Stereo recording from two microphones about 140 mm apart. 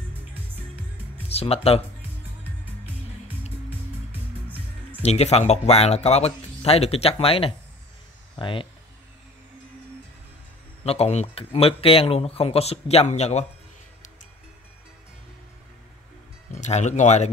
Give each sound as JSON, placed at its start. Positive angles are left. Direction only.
{"t": 1.3, "sound": "speech", "side_deg": 45}
{"t": 5.0, "sound": "speech", "side_deg": 50}
{"t": 10.8, "sound": "speech", "side_deg": 50}
{"t": 16.5, "sound": "speech", "side_deg": 55}